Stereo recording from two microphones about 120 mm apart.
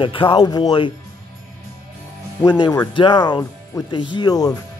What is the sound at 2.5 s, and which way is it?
Speech, 35° left (ahead or behind).